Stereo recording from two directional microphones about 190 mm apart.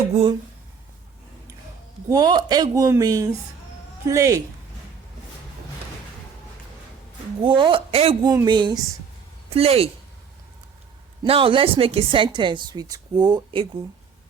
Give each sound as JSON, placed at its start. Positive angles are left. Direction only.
{"t": 0.1, "sound": "speech", "side_deg": -30}
{"t": 2.0, "sound": "a woman's voice", "side_deg": -20}
{"t": 7.4, "sound": "a woman's voice", "side_deg": -25}
{"t": 11.2, "sound": "a woman's voice", "side_deg": -30}